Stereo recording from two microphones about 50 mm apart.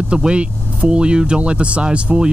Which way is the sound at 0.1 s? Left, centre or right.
Right.